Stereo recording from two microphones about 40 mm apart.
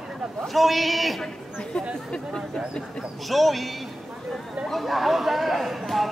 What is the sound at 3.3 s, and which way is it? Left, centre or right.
Speech, centre.